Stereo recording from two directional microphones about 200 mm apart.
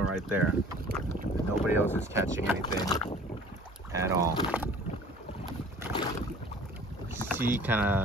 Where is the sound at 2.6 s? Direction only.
20° left (ahead or behind).